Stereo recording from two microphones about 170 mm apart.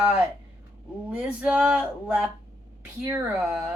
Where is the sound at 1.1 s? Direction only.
5° right (ahead or behind).